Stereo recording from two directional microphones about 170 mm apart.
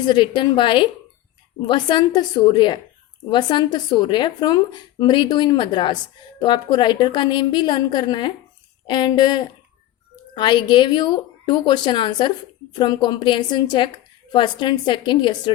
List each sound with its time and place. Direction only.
0.0 s speech: 25° left (ahead or behind)